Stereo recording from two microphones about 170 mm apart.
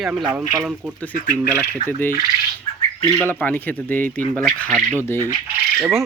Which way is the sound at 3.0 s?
20° right (ahead or behind).